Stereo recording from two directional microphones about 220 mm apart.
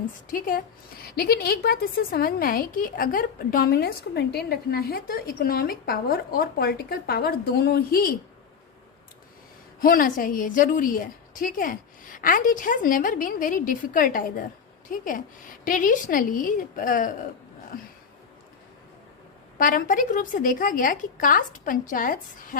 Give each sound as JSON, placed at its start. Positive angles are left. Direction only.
{"t": 0.1, "sound": "a woman's voice", "side_deg": 40}
{"t": 9.8, "sound": "a woman's voice", "side_deg": 40}
{"t": 19.5, "sound": "a woman's voice", "side_deg": 40}